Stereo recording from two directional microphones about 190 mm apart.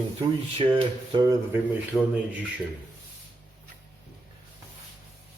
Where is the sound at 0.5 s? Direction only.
25° right (ahead or behind).